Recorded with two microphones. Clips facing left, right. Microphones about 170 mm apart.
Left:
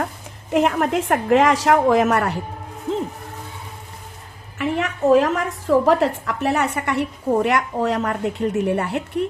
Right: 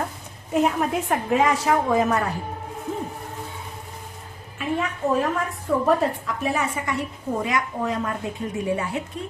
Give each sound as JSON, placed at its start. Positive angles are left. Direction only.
{"t": 0.5, "sound": "a woman's voice", "side_deg": 75}
{"t": 4.5, "sound": "a woman's voice", "side_deg": 85}